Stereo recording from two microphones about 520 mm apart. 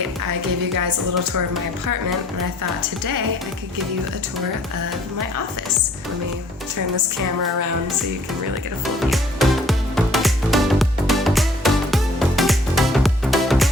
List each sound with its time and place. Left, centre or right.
0.8 s speech: right
3.0 s speech: right
9.0 s music: centre